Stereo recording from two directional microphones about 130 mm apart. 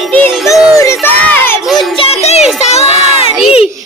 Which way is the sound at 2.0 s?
50° left (ahead or behind).